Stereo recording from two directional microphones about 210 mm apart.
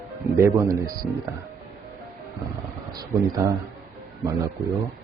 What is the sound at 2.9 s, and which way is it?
Speech, 15° right (ahead or behind).